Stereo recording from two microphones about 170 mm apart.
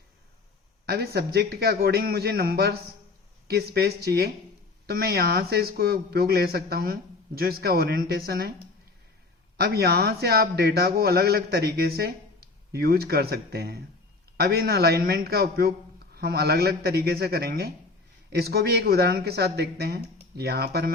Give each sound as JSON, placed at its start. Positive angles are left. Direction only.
{"t": 0.9, "sound": "a man's voice", "side_deg": -70}
{"t": 9.6, "sound": "a man's voice", "side_deg": -70}